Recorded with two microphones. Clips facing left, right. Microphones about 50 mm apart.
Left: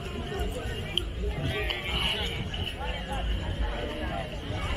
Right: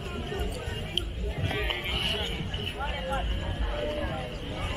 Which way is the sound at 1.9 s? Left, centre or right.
Centre.